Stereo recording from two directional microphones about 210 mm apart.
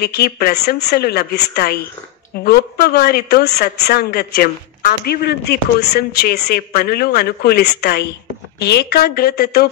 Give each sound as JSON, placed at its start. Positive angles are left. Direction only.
{"t": 0.0, "sound": "speech", "side_deg": 50}